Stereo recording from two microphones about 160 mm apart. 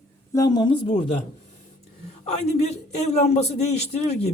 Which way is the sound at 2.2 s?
40° left (ahead or behind).